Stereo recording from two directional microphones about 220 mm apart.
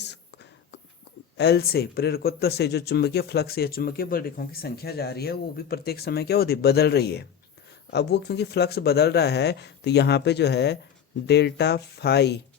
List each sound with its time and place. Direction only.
1.4 s speech: 45° left (ahead or behind)